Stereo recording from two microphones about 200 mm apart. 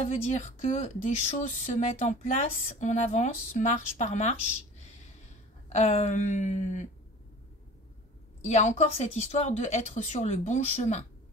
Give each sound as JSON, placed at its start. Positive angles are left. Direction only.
{"t": 0.0, "sound": "speech", "side_deg": 35}
{"t": 5.7, "sound": "speech", "side_deg": 35}
{"t": 8.4, "sound": "speech", "side_deg": 35}